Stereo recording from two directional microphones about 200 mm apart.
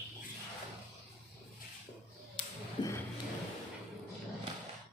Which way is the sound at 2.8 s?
20° left (ahead or behind).